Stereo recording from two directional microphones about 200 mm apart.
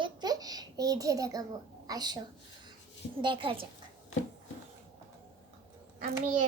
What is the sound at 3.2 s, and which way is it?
Speech, 25° right (ahead or behind).